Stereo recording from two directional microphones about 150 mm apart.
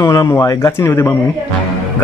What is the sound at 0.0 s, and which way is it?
A man's voice, 20° left (ahead or behind).